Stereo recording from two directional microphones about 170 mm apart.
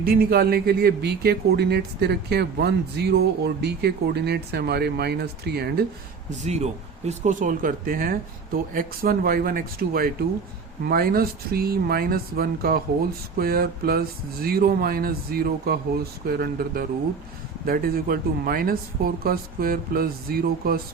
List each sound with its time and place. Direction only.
0.0 s speech: 60° right (ahead or behind)
6.4 s speech: 40° right (ahead or behind); by 20.8 s 60° right (ahead or behind)